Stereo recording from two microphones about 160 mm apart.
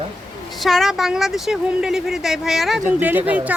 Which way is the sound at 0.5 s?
Centre (ahead or behind).